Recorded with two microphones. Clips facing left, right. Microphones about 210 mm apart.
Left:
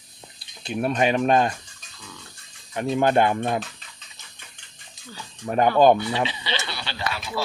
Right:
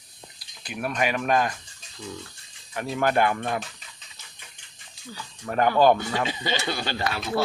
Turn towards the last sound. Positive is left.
turn(degrees=-50)  # may be behind; listen again after turning